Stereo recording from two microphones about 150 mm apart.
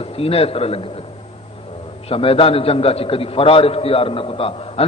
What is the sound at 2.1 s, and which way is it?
A man's voice, 40° left (ahead or behind).